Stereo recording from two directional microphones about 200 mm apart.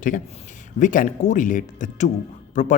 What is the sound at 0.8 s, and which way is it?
Speech, 40° left (ahead or behind).